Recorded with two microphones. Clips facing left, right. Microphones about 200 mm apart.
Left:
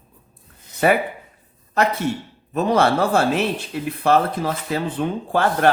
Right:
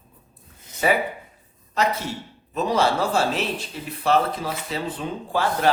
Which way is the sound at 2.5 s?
55° left (ahead or behind).